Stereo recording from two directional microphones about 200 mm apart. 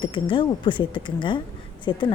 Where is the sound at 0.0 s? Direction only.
25° left (ahead or behind).